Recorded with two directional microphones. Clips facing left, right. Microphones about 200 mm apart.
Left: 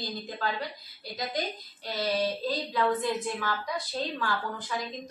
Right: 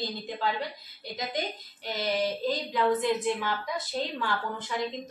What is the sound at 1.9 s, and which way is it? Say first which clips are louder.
A woman's voice: even; 20° right (ahead or behind).